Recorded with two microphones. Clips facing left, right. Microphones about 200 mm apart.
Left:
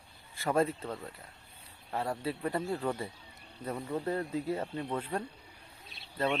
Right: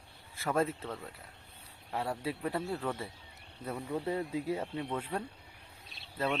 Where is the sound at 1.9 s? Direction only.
10° right (ahead or behind).